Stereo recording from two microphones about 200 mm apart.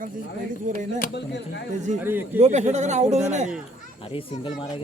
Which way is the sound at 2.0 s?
10° right (ahead or behind).